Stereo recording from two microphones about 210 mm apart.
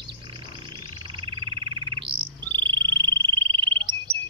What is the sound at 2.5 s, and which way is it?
Bird, 20° right (ahead or behind).